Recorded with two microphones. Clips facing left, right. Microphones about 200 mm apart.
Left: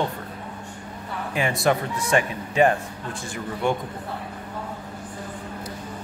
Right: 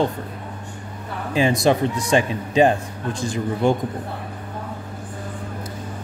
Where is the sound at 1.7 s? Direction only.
25° right (ahead or behind).